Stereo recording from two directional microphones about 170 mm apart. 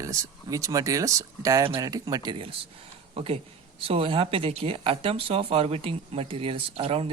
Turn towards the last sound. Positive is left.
turn(degrees=-35)  # may be behind; listen again after turning